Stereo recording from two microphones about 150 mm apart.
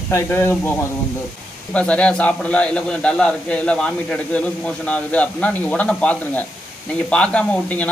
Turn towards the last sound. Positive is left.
turn(degrees=10)  # may be behind; listen again after turning